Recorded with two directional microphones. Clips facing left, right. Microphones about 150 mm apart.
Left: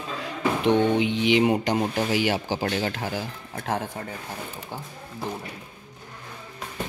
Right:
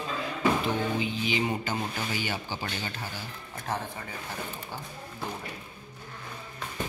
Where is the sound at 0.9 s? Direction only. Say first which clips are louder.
Left 8 dB; 85° left.